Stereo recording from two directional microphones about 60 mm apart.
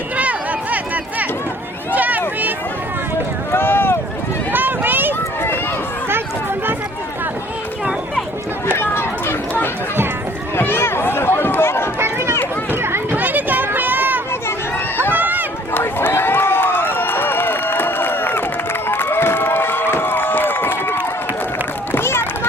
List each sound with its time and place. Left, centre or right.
0.2 s a sound: right
2.0 s a sound: right
3.5 s boat: left
4.5 s run: right
8.8 s chatter: left
10.6 s run: left
11.9 s run: right
12.7 s a sound: right
15.1 s run: right
15.7 s crowd: left
21.9 s run: left